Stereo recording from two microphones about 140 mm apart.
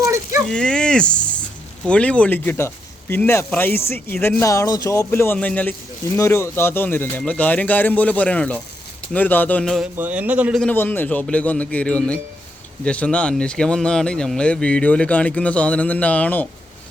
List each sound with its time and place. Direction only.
0.0 s a sound: 20° right (ahead or behind)
0.4 s speech: 5° left (ahead or behind)
10.0 s speech: 10° right (ahead or behind)
10.6 s speech: 10° left (ahead or behind)